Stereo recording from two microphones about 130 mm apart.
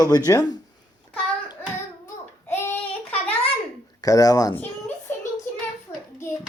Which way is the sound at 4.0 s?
30° left (ahead or behind).